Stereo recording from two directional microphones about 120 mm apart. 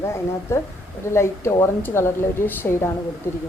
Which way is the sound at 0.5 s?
20° left (ahead or behind).